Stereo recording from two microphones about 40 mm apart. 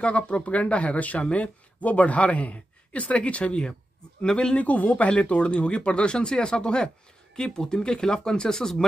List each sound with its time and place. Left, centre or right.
0.0 s a man's voice: left
4.2 s speech: centre
4.6 s speech: left; by 8.8 s centre